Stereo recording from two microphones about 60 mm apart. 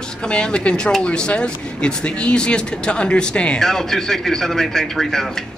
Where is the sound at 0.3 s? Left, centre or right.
Centre.